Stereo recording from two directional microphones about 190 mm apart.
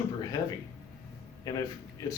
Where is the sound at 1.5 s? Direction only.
20° left (ahead or behind).